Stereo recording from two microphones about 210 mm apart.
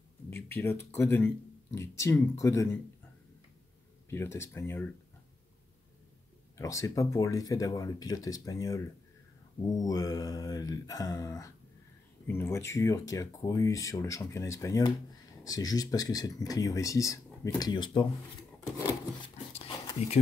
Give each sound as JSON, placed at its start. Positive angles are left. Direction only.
{"t": 0.3, "sound": "speech", "side_deg": 10}
{"t": 4.1, "sound": "speech", "side_deg": 10}
{"t": 6.5, "sound": "speech", "side_deg": 15}
{"t": 19.3, "sound": "a sound", "side_deg": 25}